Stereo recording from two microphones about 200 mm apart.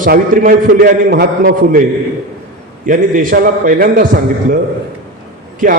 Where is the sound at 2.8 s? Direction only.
45° right (ahead or behind).